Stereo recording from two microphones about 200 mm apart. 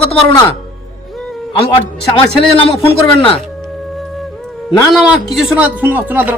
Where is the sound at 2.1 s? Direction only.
30° left (ahead or behind).